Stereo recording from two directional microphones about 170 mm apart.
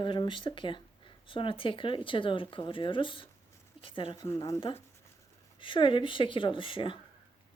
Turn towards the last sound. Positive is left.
turn(degrees=30)  # may be behind; listen again after turning